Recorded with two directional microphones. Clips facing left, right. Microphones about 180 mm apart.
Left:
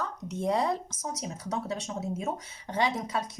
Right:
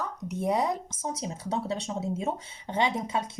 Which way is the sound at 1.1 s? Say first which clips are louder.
Right 2 dB; 30° right (ahead or behind).